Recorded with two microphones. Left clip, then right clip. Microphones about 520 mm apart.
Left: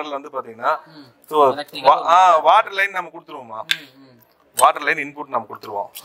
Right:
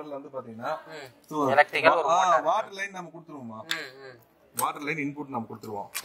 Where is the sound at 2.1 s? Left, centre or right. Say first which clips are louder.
Left 10 dB; left.